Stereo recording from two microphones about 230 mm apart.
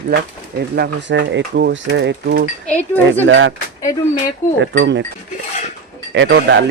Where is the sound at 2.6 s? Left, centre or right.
Centre.